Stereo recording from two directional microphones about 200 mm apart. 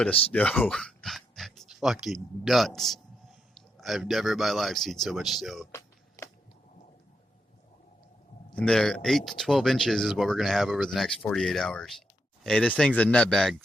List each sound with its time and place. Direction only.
0.0 s speech: 5° left (ahead or behind)
6.2 s a sound: 15° left (ahead or behind)
8.5 s speech: 5° left (ahead or behind)